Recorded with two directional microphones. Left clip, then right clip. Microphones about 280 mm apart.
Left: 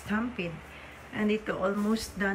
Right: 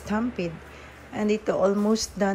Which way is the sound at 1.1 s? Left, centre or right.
Centre.